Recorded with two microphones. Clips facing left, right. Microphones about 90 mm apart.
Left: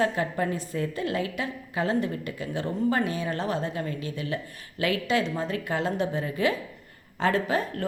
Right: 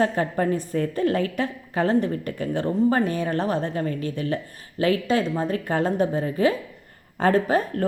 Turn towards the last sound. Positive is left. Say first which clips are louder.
# right 5 dB
turn(degrees=-40)  # may be behind; listen again after turning